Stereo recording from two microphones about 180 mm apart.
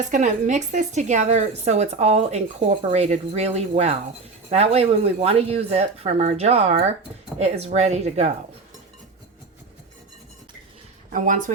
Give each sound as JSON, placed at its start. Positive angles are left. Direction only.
{"t": 0.0, "sound": "speech", "side_deg": -45}
{"t": 11.1, "sound": "speech", "side_deg": -50}